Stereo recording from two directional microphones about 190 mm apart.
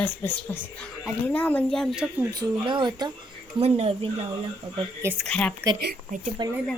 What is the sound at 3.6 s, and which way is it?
Speech, 35° right (ahead or behind).